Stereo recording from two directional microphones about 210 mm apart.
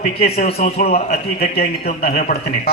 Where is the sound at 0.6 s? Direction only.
45° left (ahead or behind).